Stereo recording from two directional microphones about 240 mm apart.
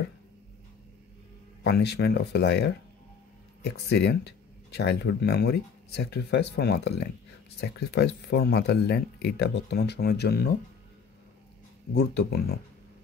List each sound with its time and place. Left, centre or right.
1.6 s speech: left
11.9 s speech: left